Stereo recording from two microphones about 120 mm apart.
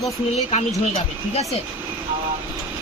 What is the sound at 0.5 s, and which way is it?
Speech, 65° left (ahead or behind).